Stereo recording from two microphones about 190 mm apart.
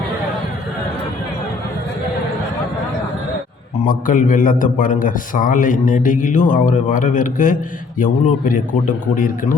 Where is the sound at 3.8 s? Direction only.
45° left (ahead or behind).